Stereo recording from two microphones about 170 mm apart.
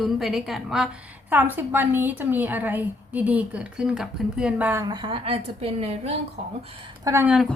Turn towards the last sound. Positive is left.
turn(degrees=0)  # may be behind; listen again after turning